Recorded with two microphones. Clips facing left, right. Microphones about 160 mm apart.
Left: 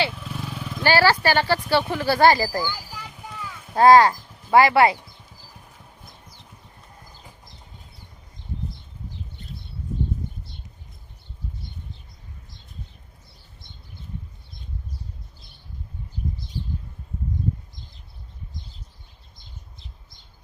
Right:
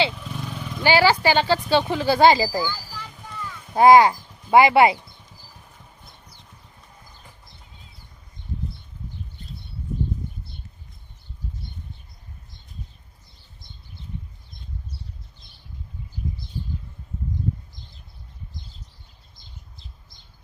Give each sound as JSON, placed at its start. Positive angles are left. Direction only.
{"t": 0.1, "sound": "vehicle", "side_deg": 0}
{"t": 0.8, "sound": "speech", "side_deg": -15}
{"t": 2.6, "sound": "a sound", "side_deg": 10}
{"t": 3.8, "sound": "speech", "side_deg": -15}